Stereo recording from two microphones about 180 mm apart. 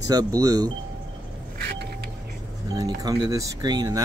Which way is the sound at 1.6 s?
65° right (ahead or behind).